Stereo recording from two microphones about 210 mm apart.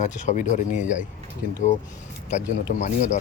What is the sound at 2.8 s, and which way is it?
Speech, 35° left (ahead or behind).